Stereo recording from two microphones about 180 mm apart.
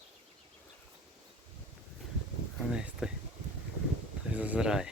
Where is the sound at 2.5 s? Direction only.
5° right (ahead or behind).